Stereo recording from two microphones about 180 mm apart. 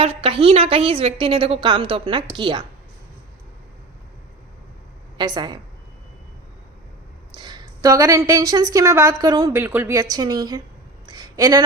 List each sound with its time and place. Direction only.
0.0 s a woman's voice: 30° right (ahead or behind)
5.1 s a woman's voice: 25° right (ahead or behind)
7.3 s a woman's voice: 20° right (ahead or behind)
11.0 s a sound: 25° right (ahead or behind)